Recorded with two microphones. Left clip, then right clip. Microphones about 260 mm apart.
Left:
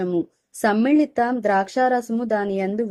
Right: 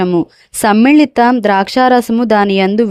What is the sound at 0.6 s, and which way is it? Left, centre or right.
Speech, right.